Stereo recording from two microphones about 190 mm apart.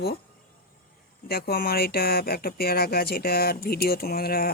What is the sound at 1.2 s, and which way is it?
Speech, 55° left (ahead or behind).